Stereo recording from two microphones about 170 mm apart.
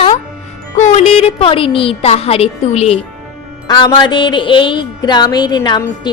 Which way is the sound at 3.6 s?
25° left (ahead or behind).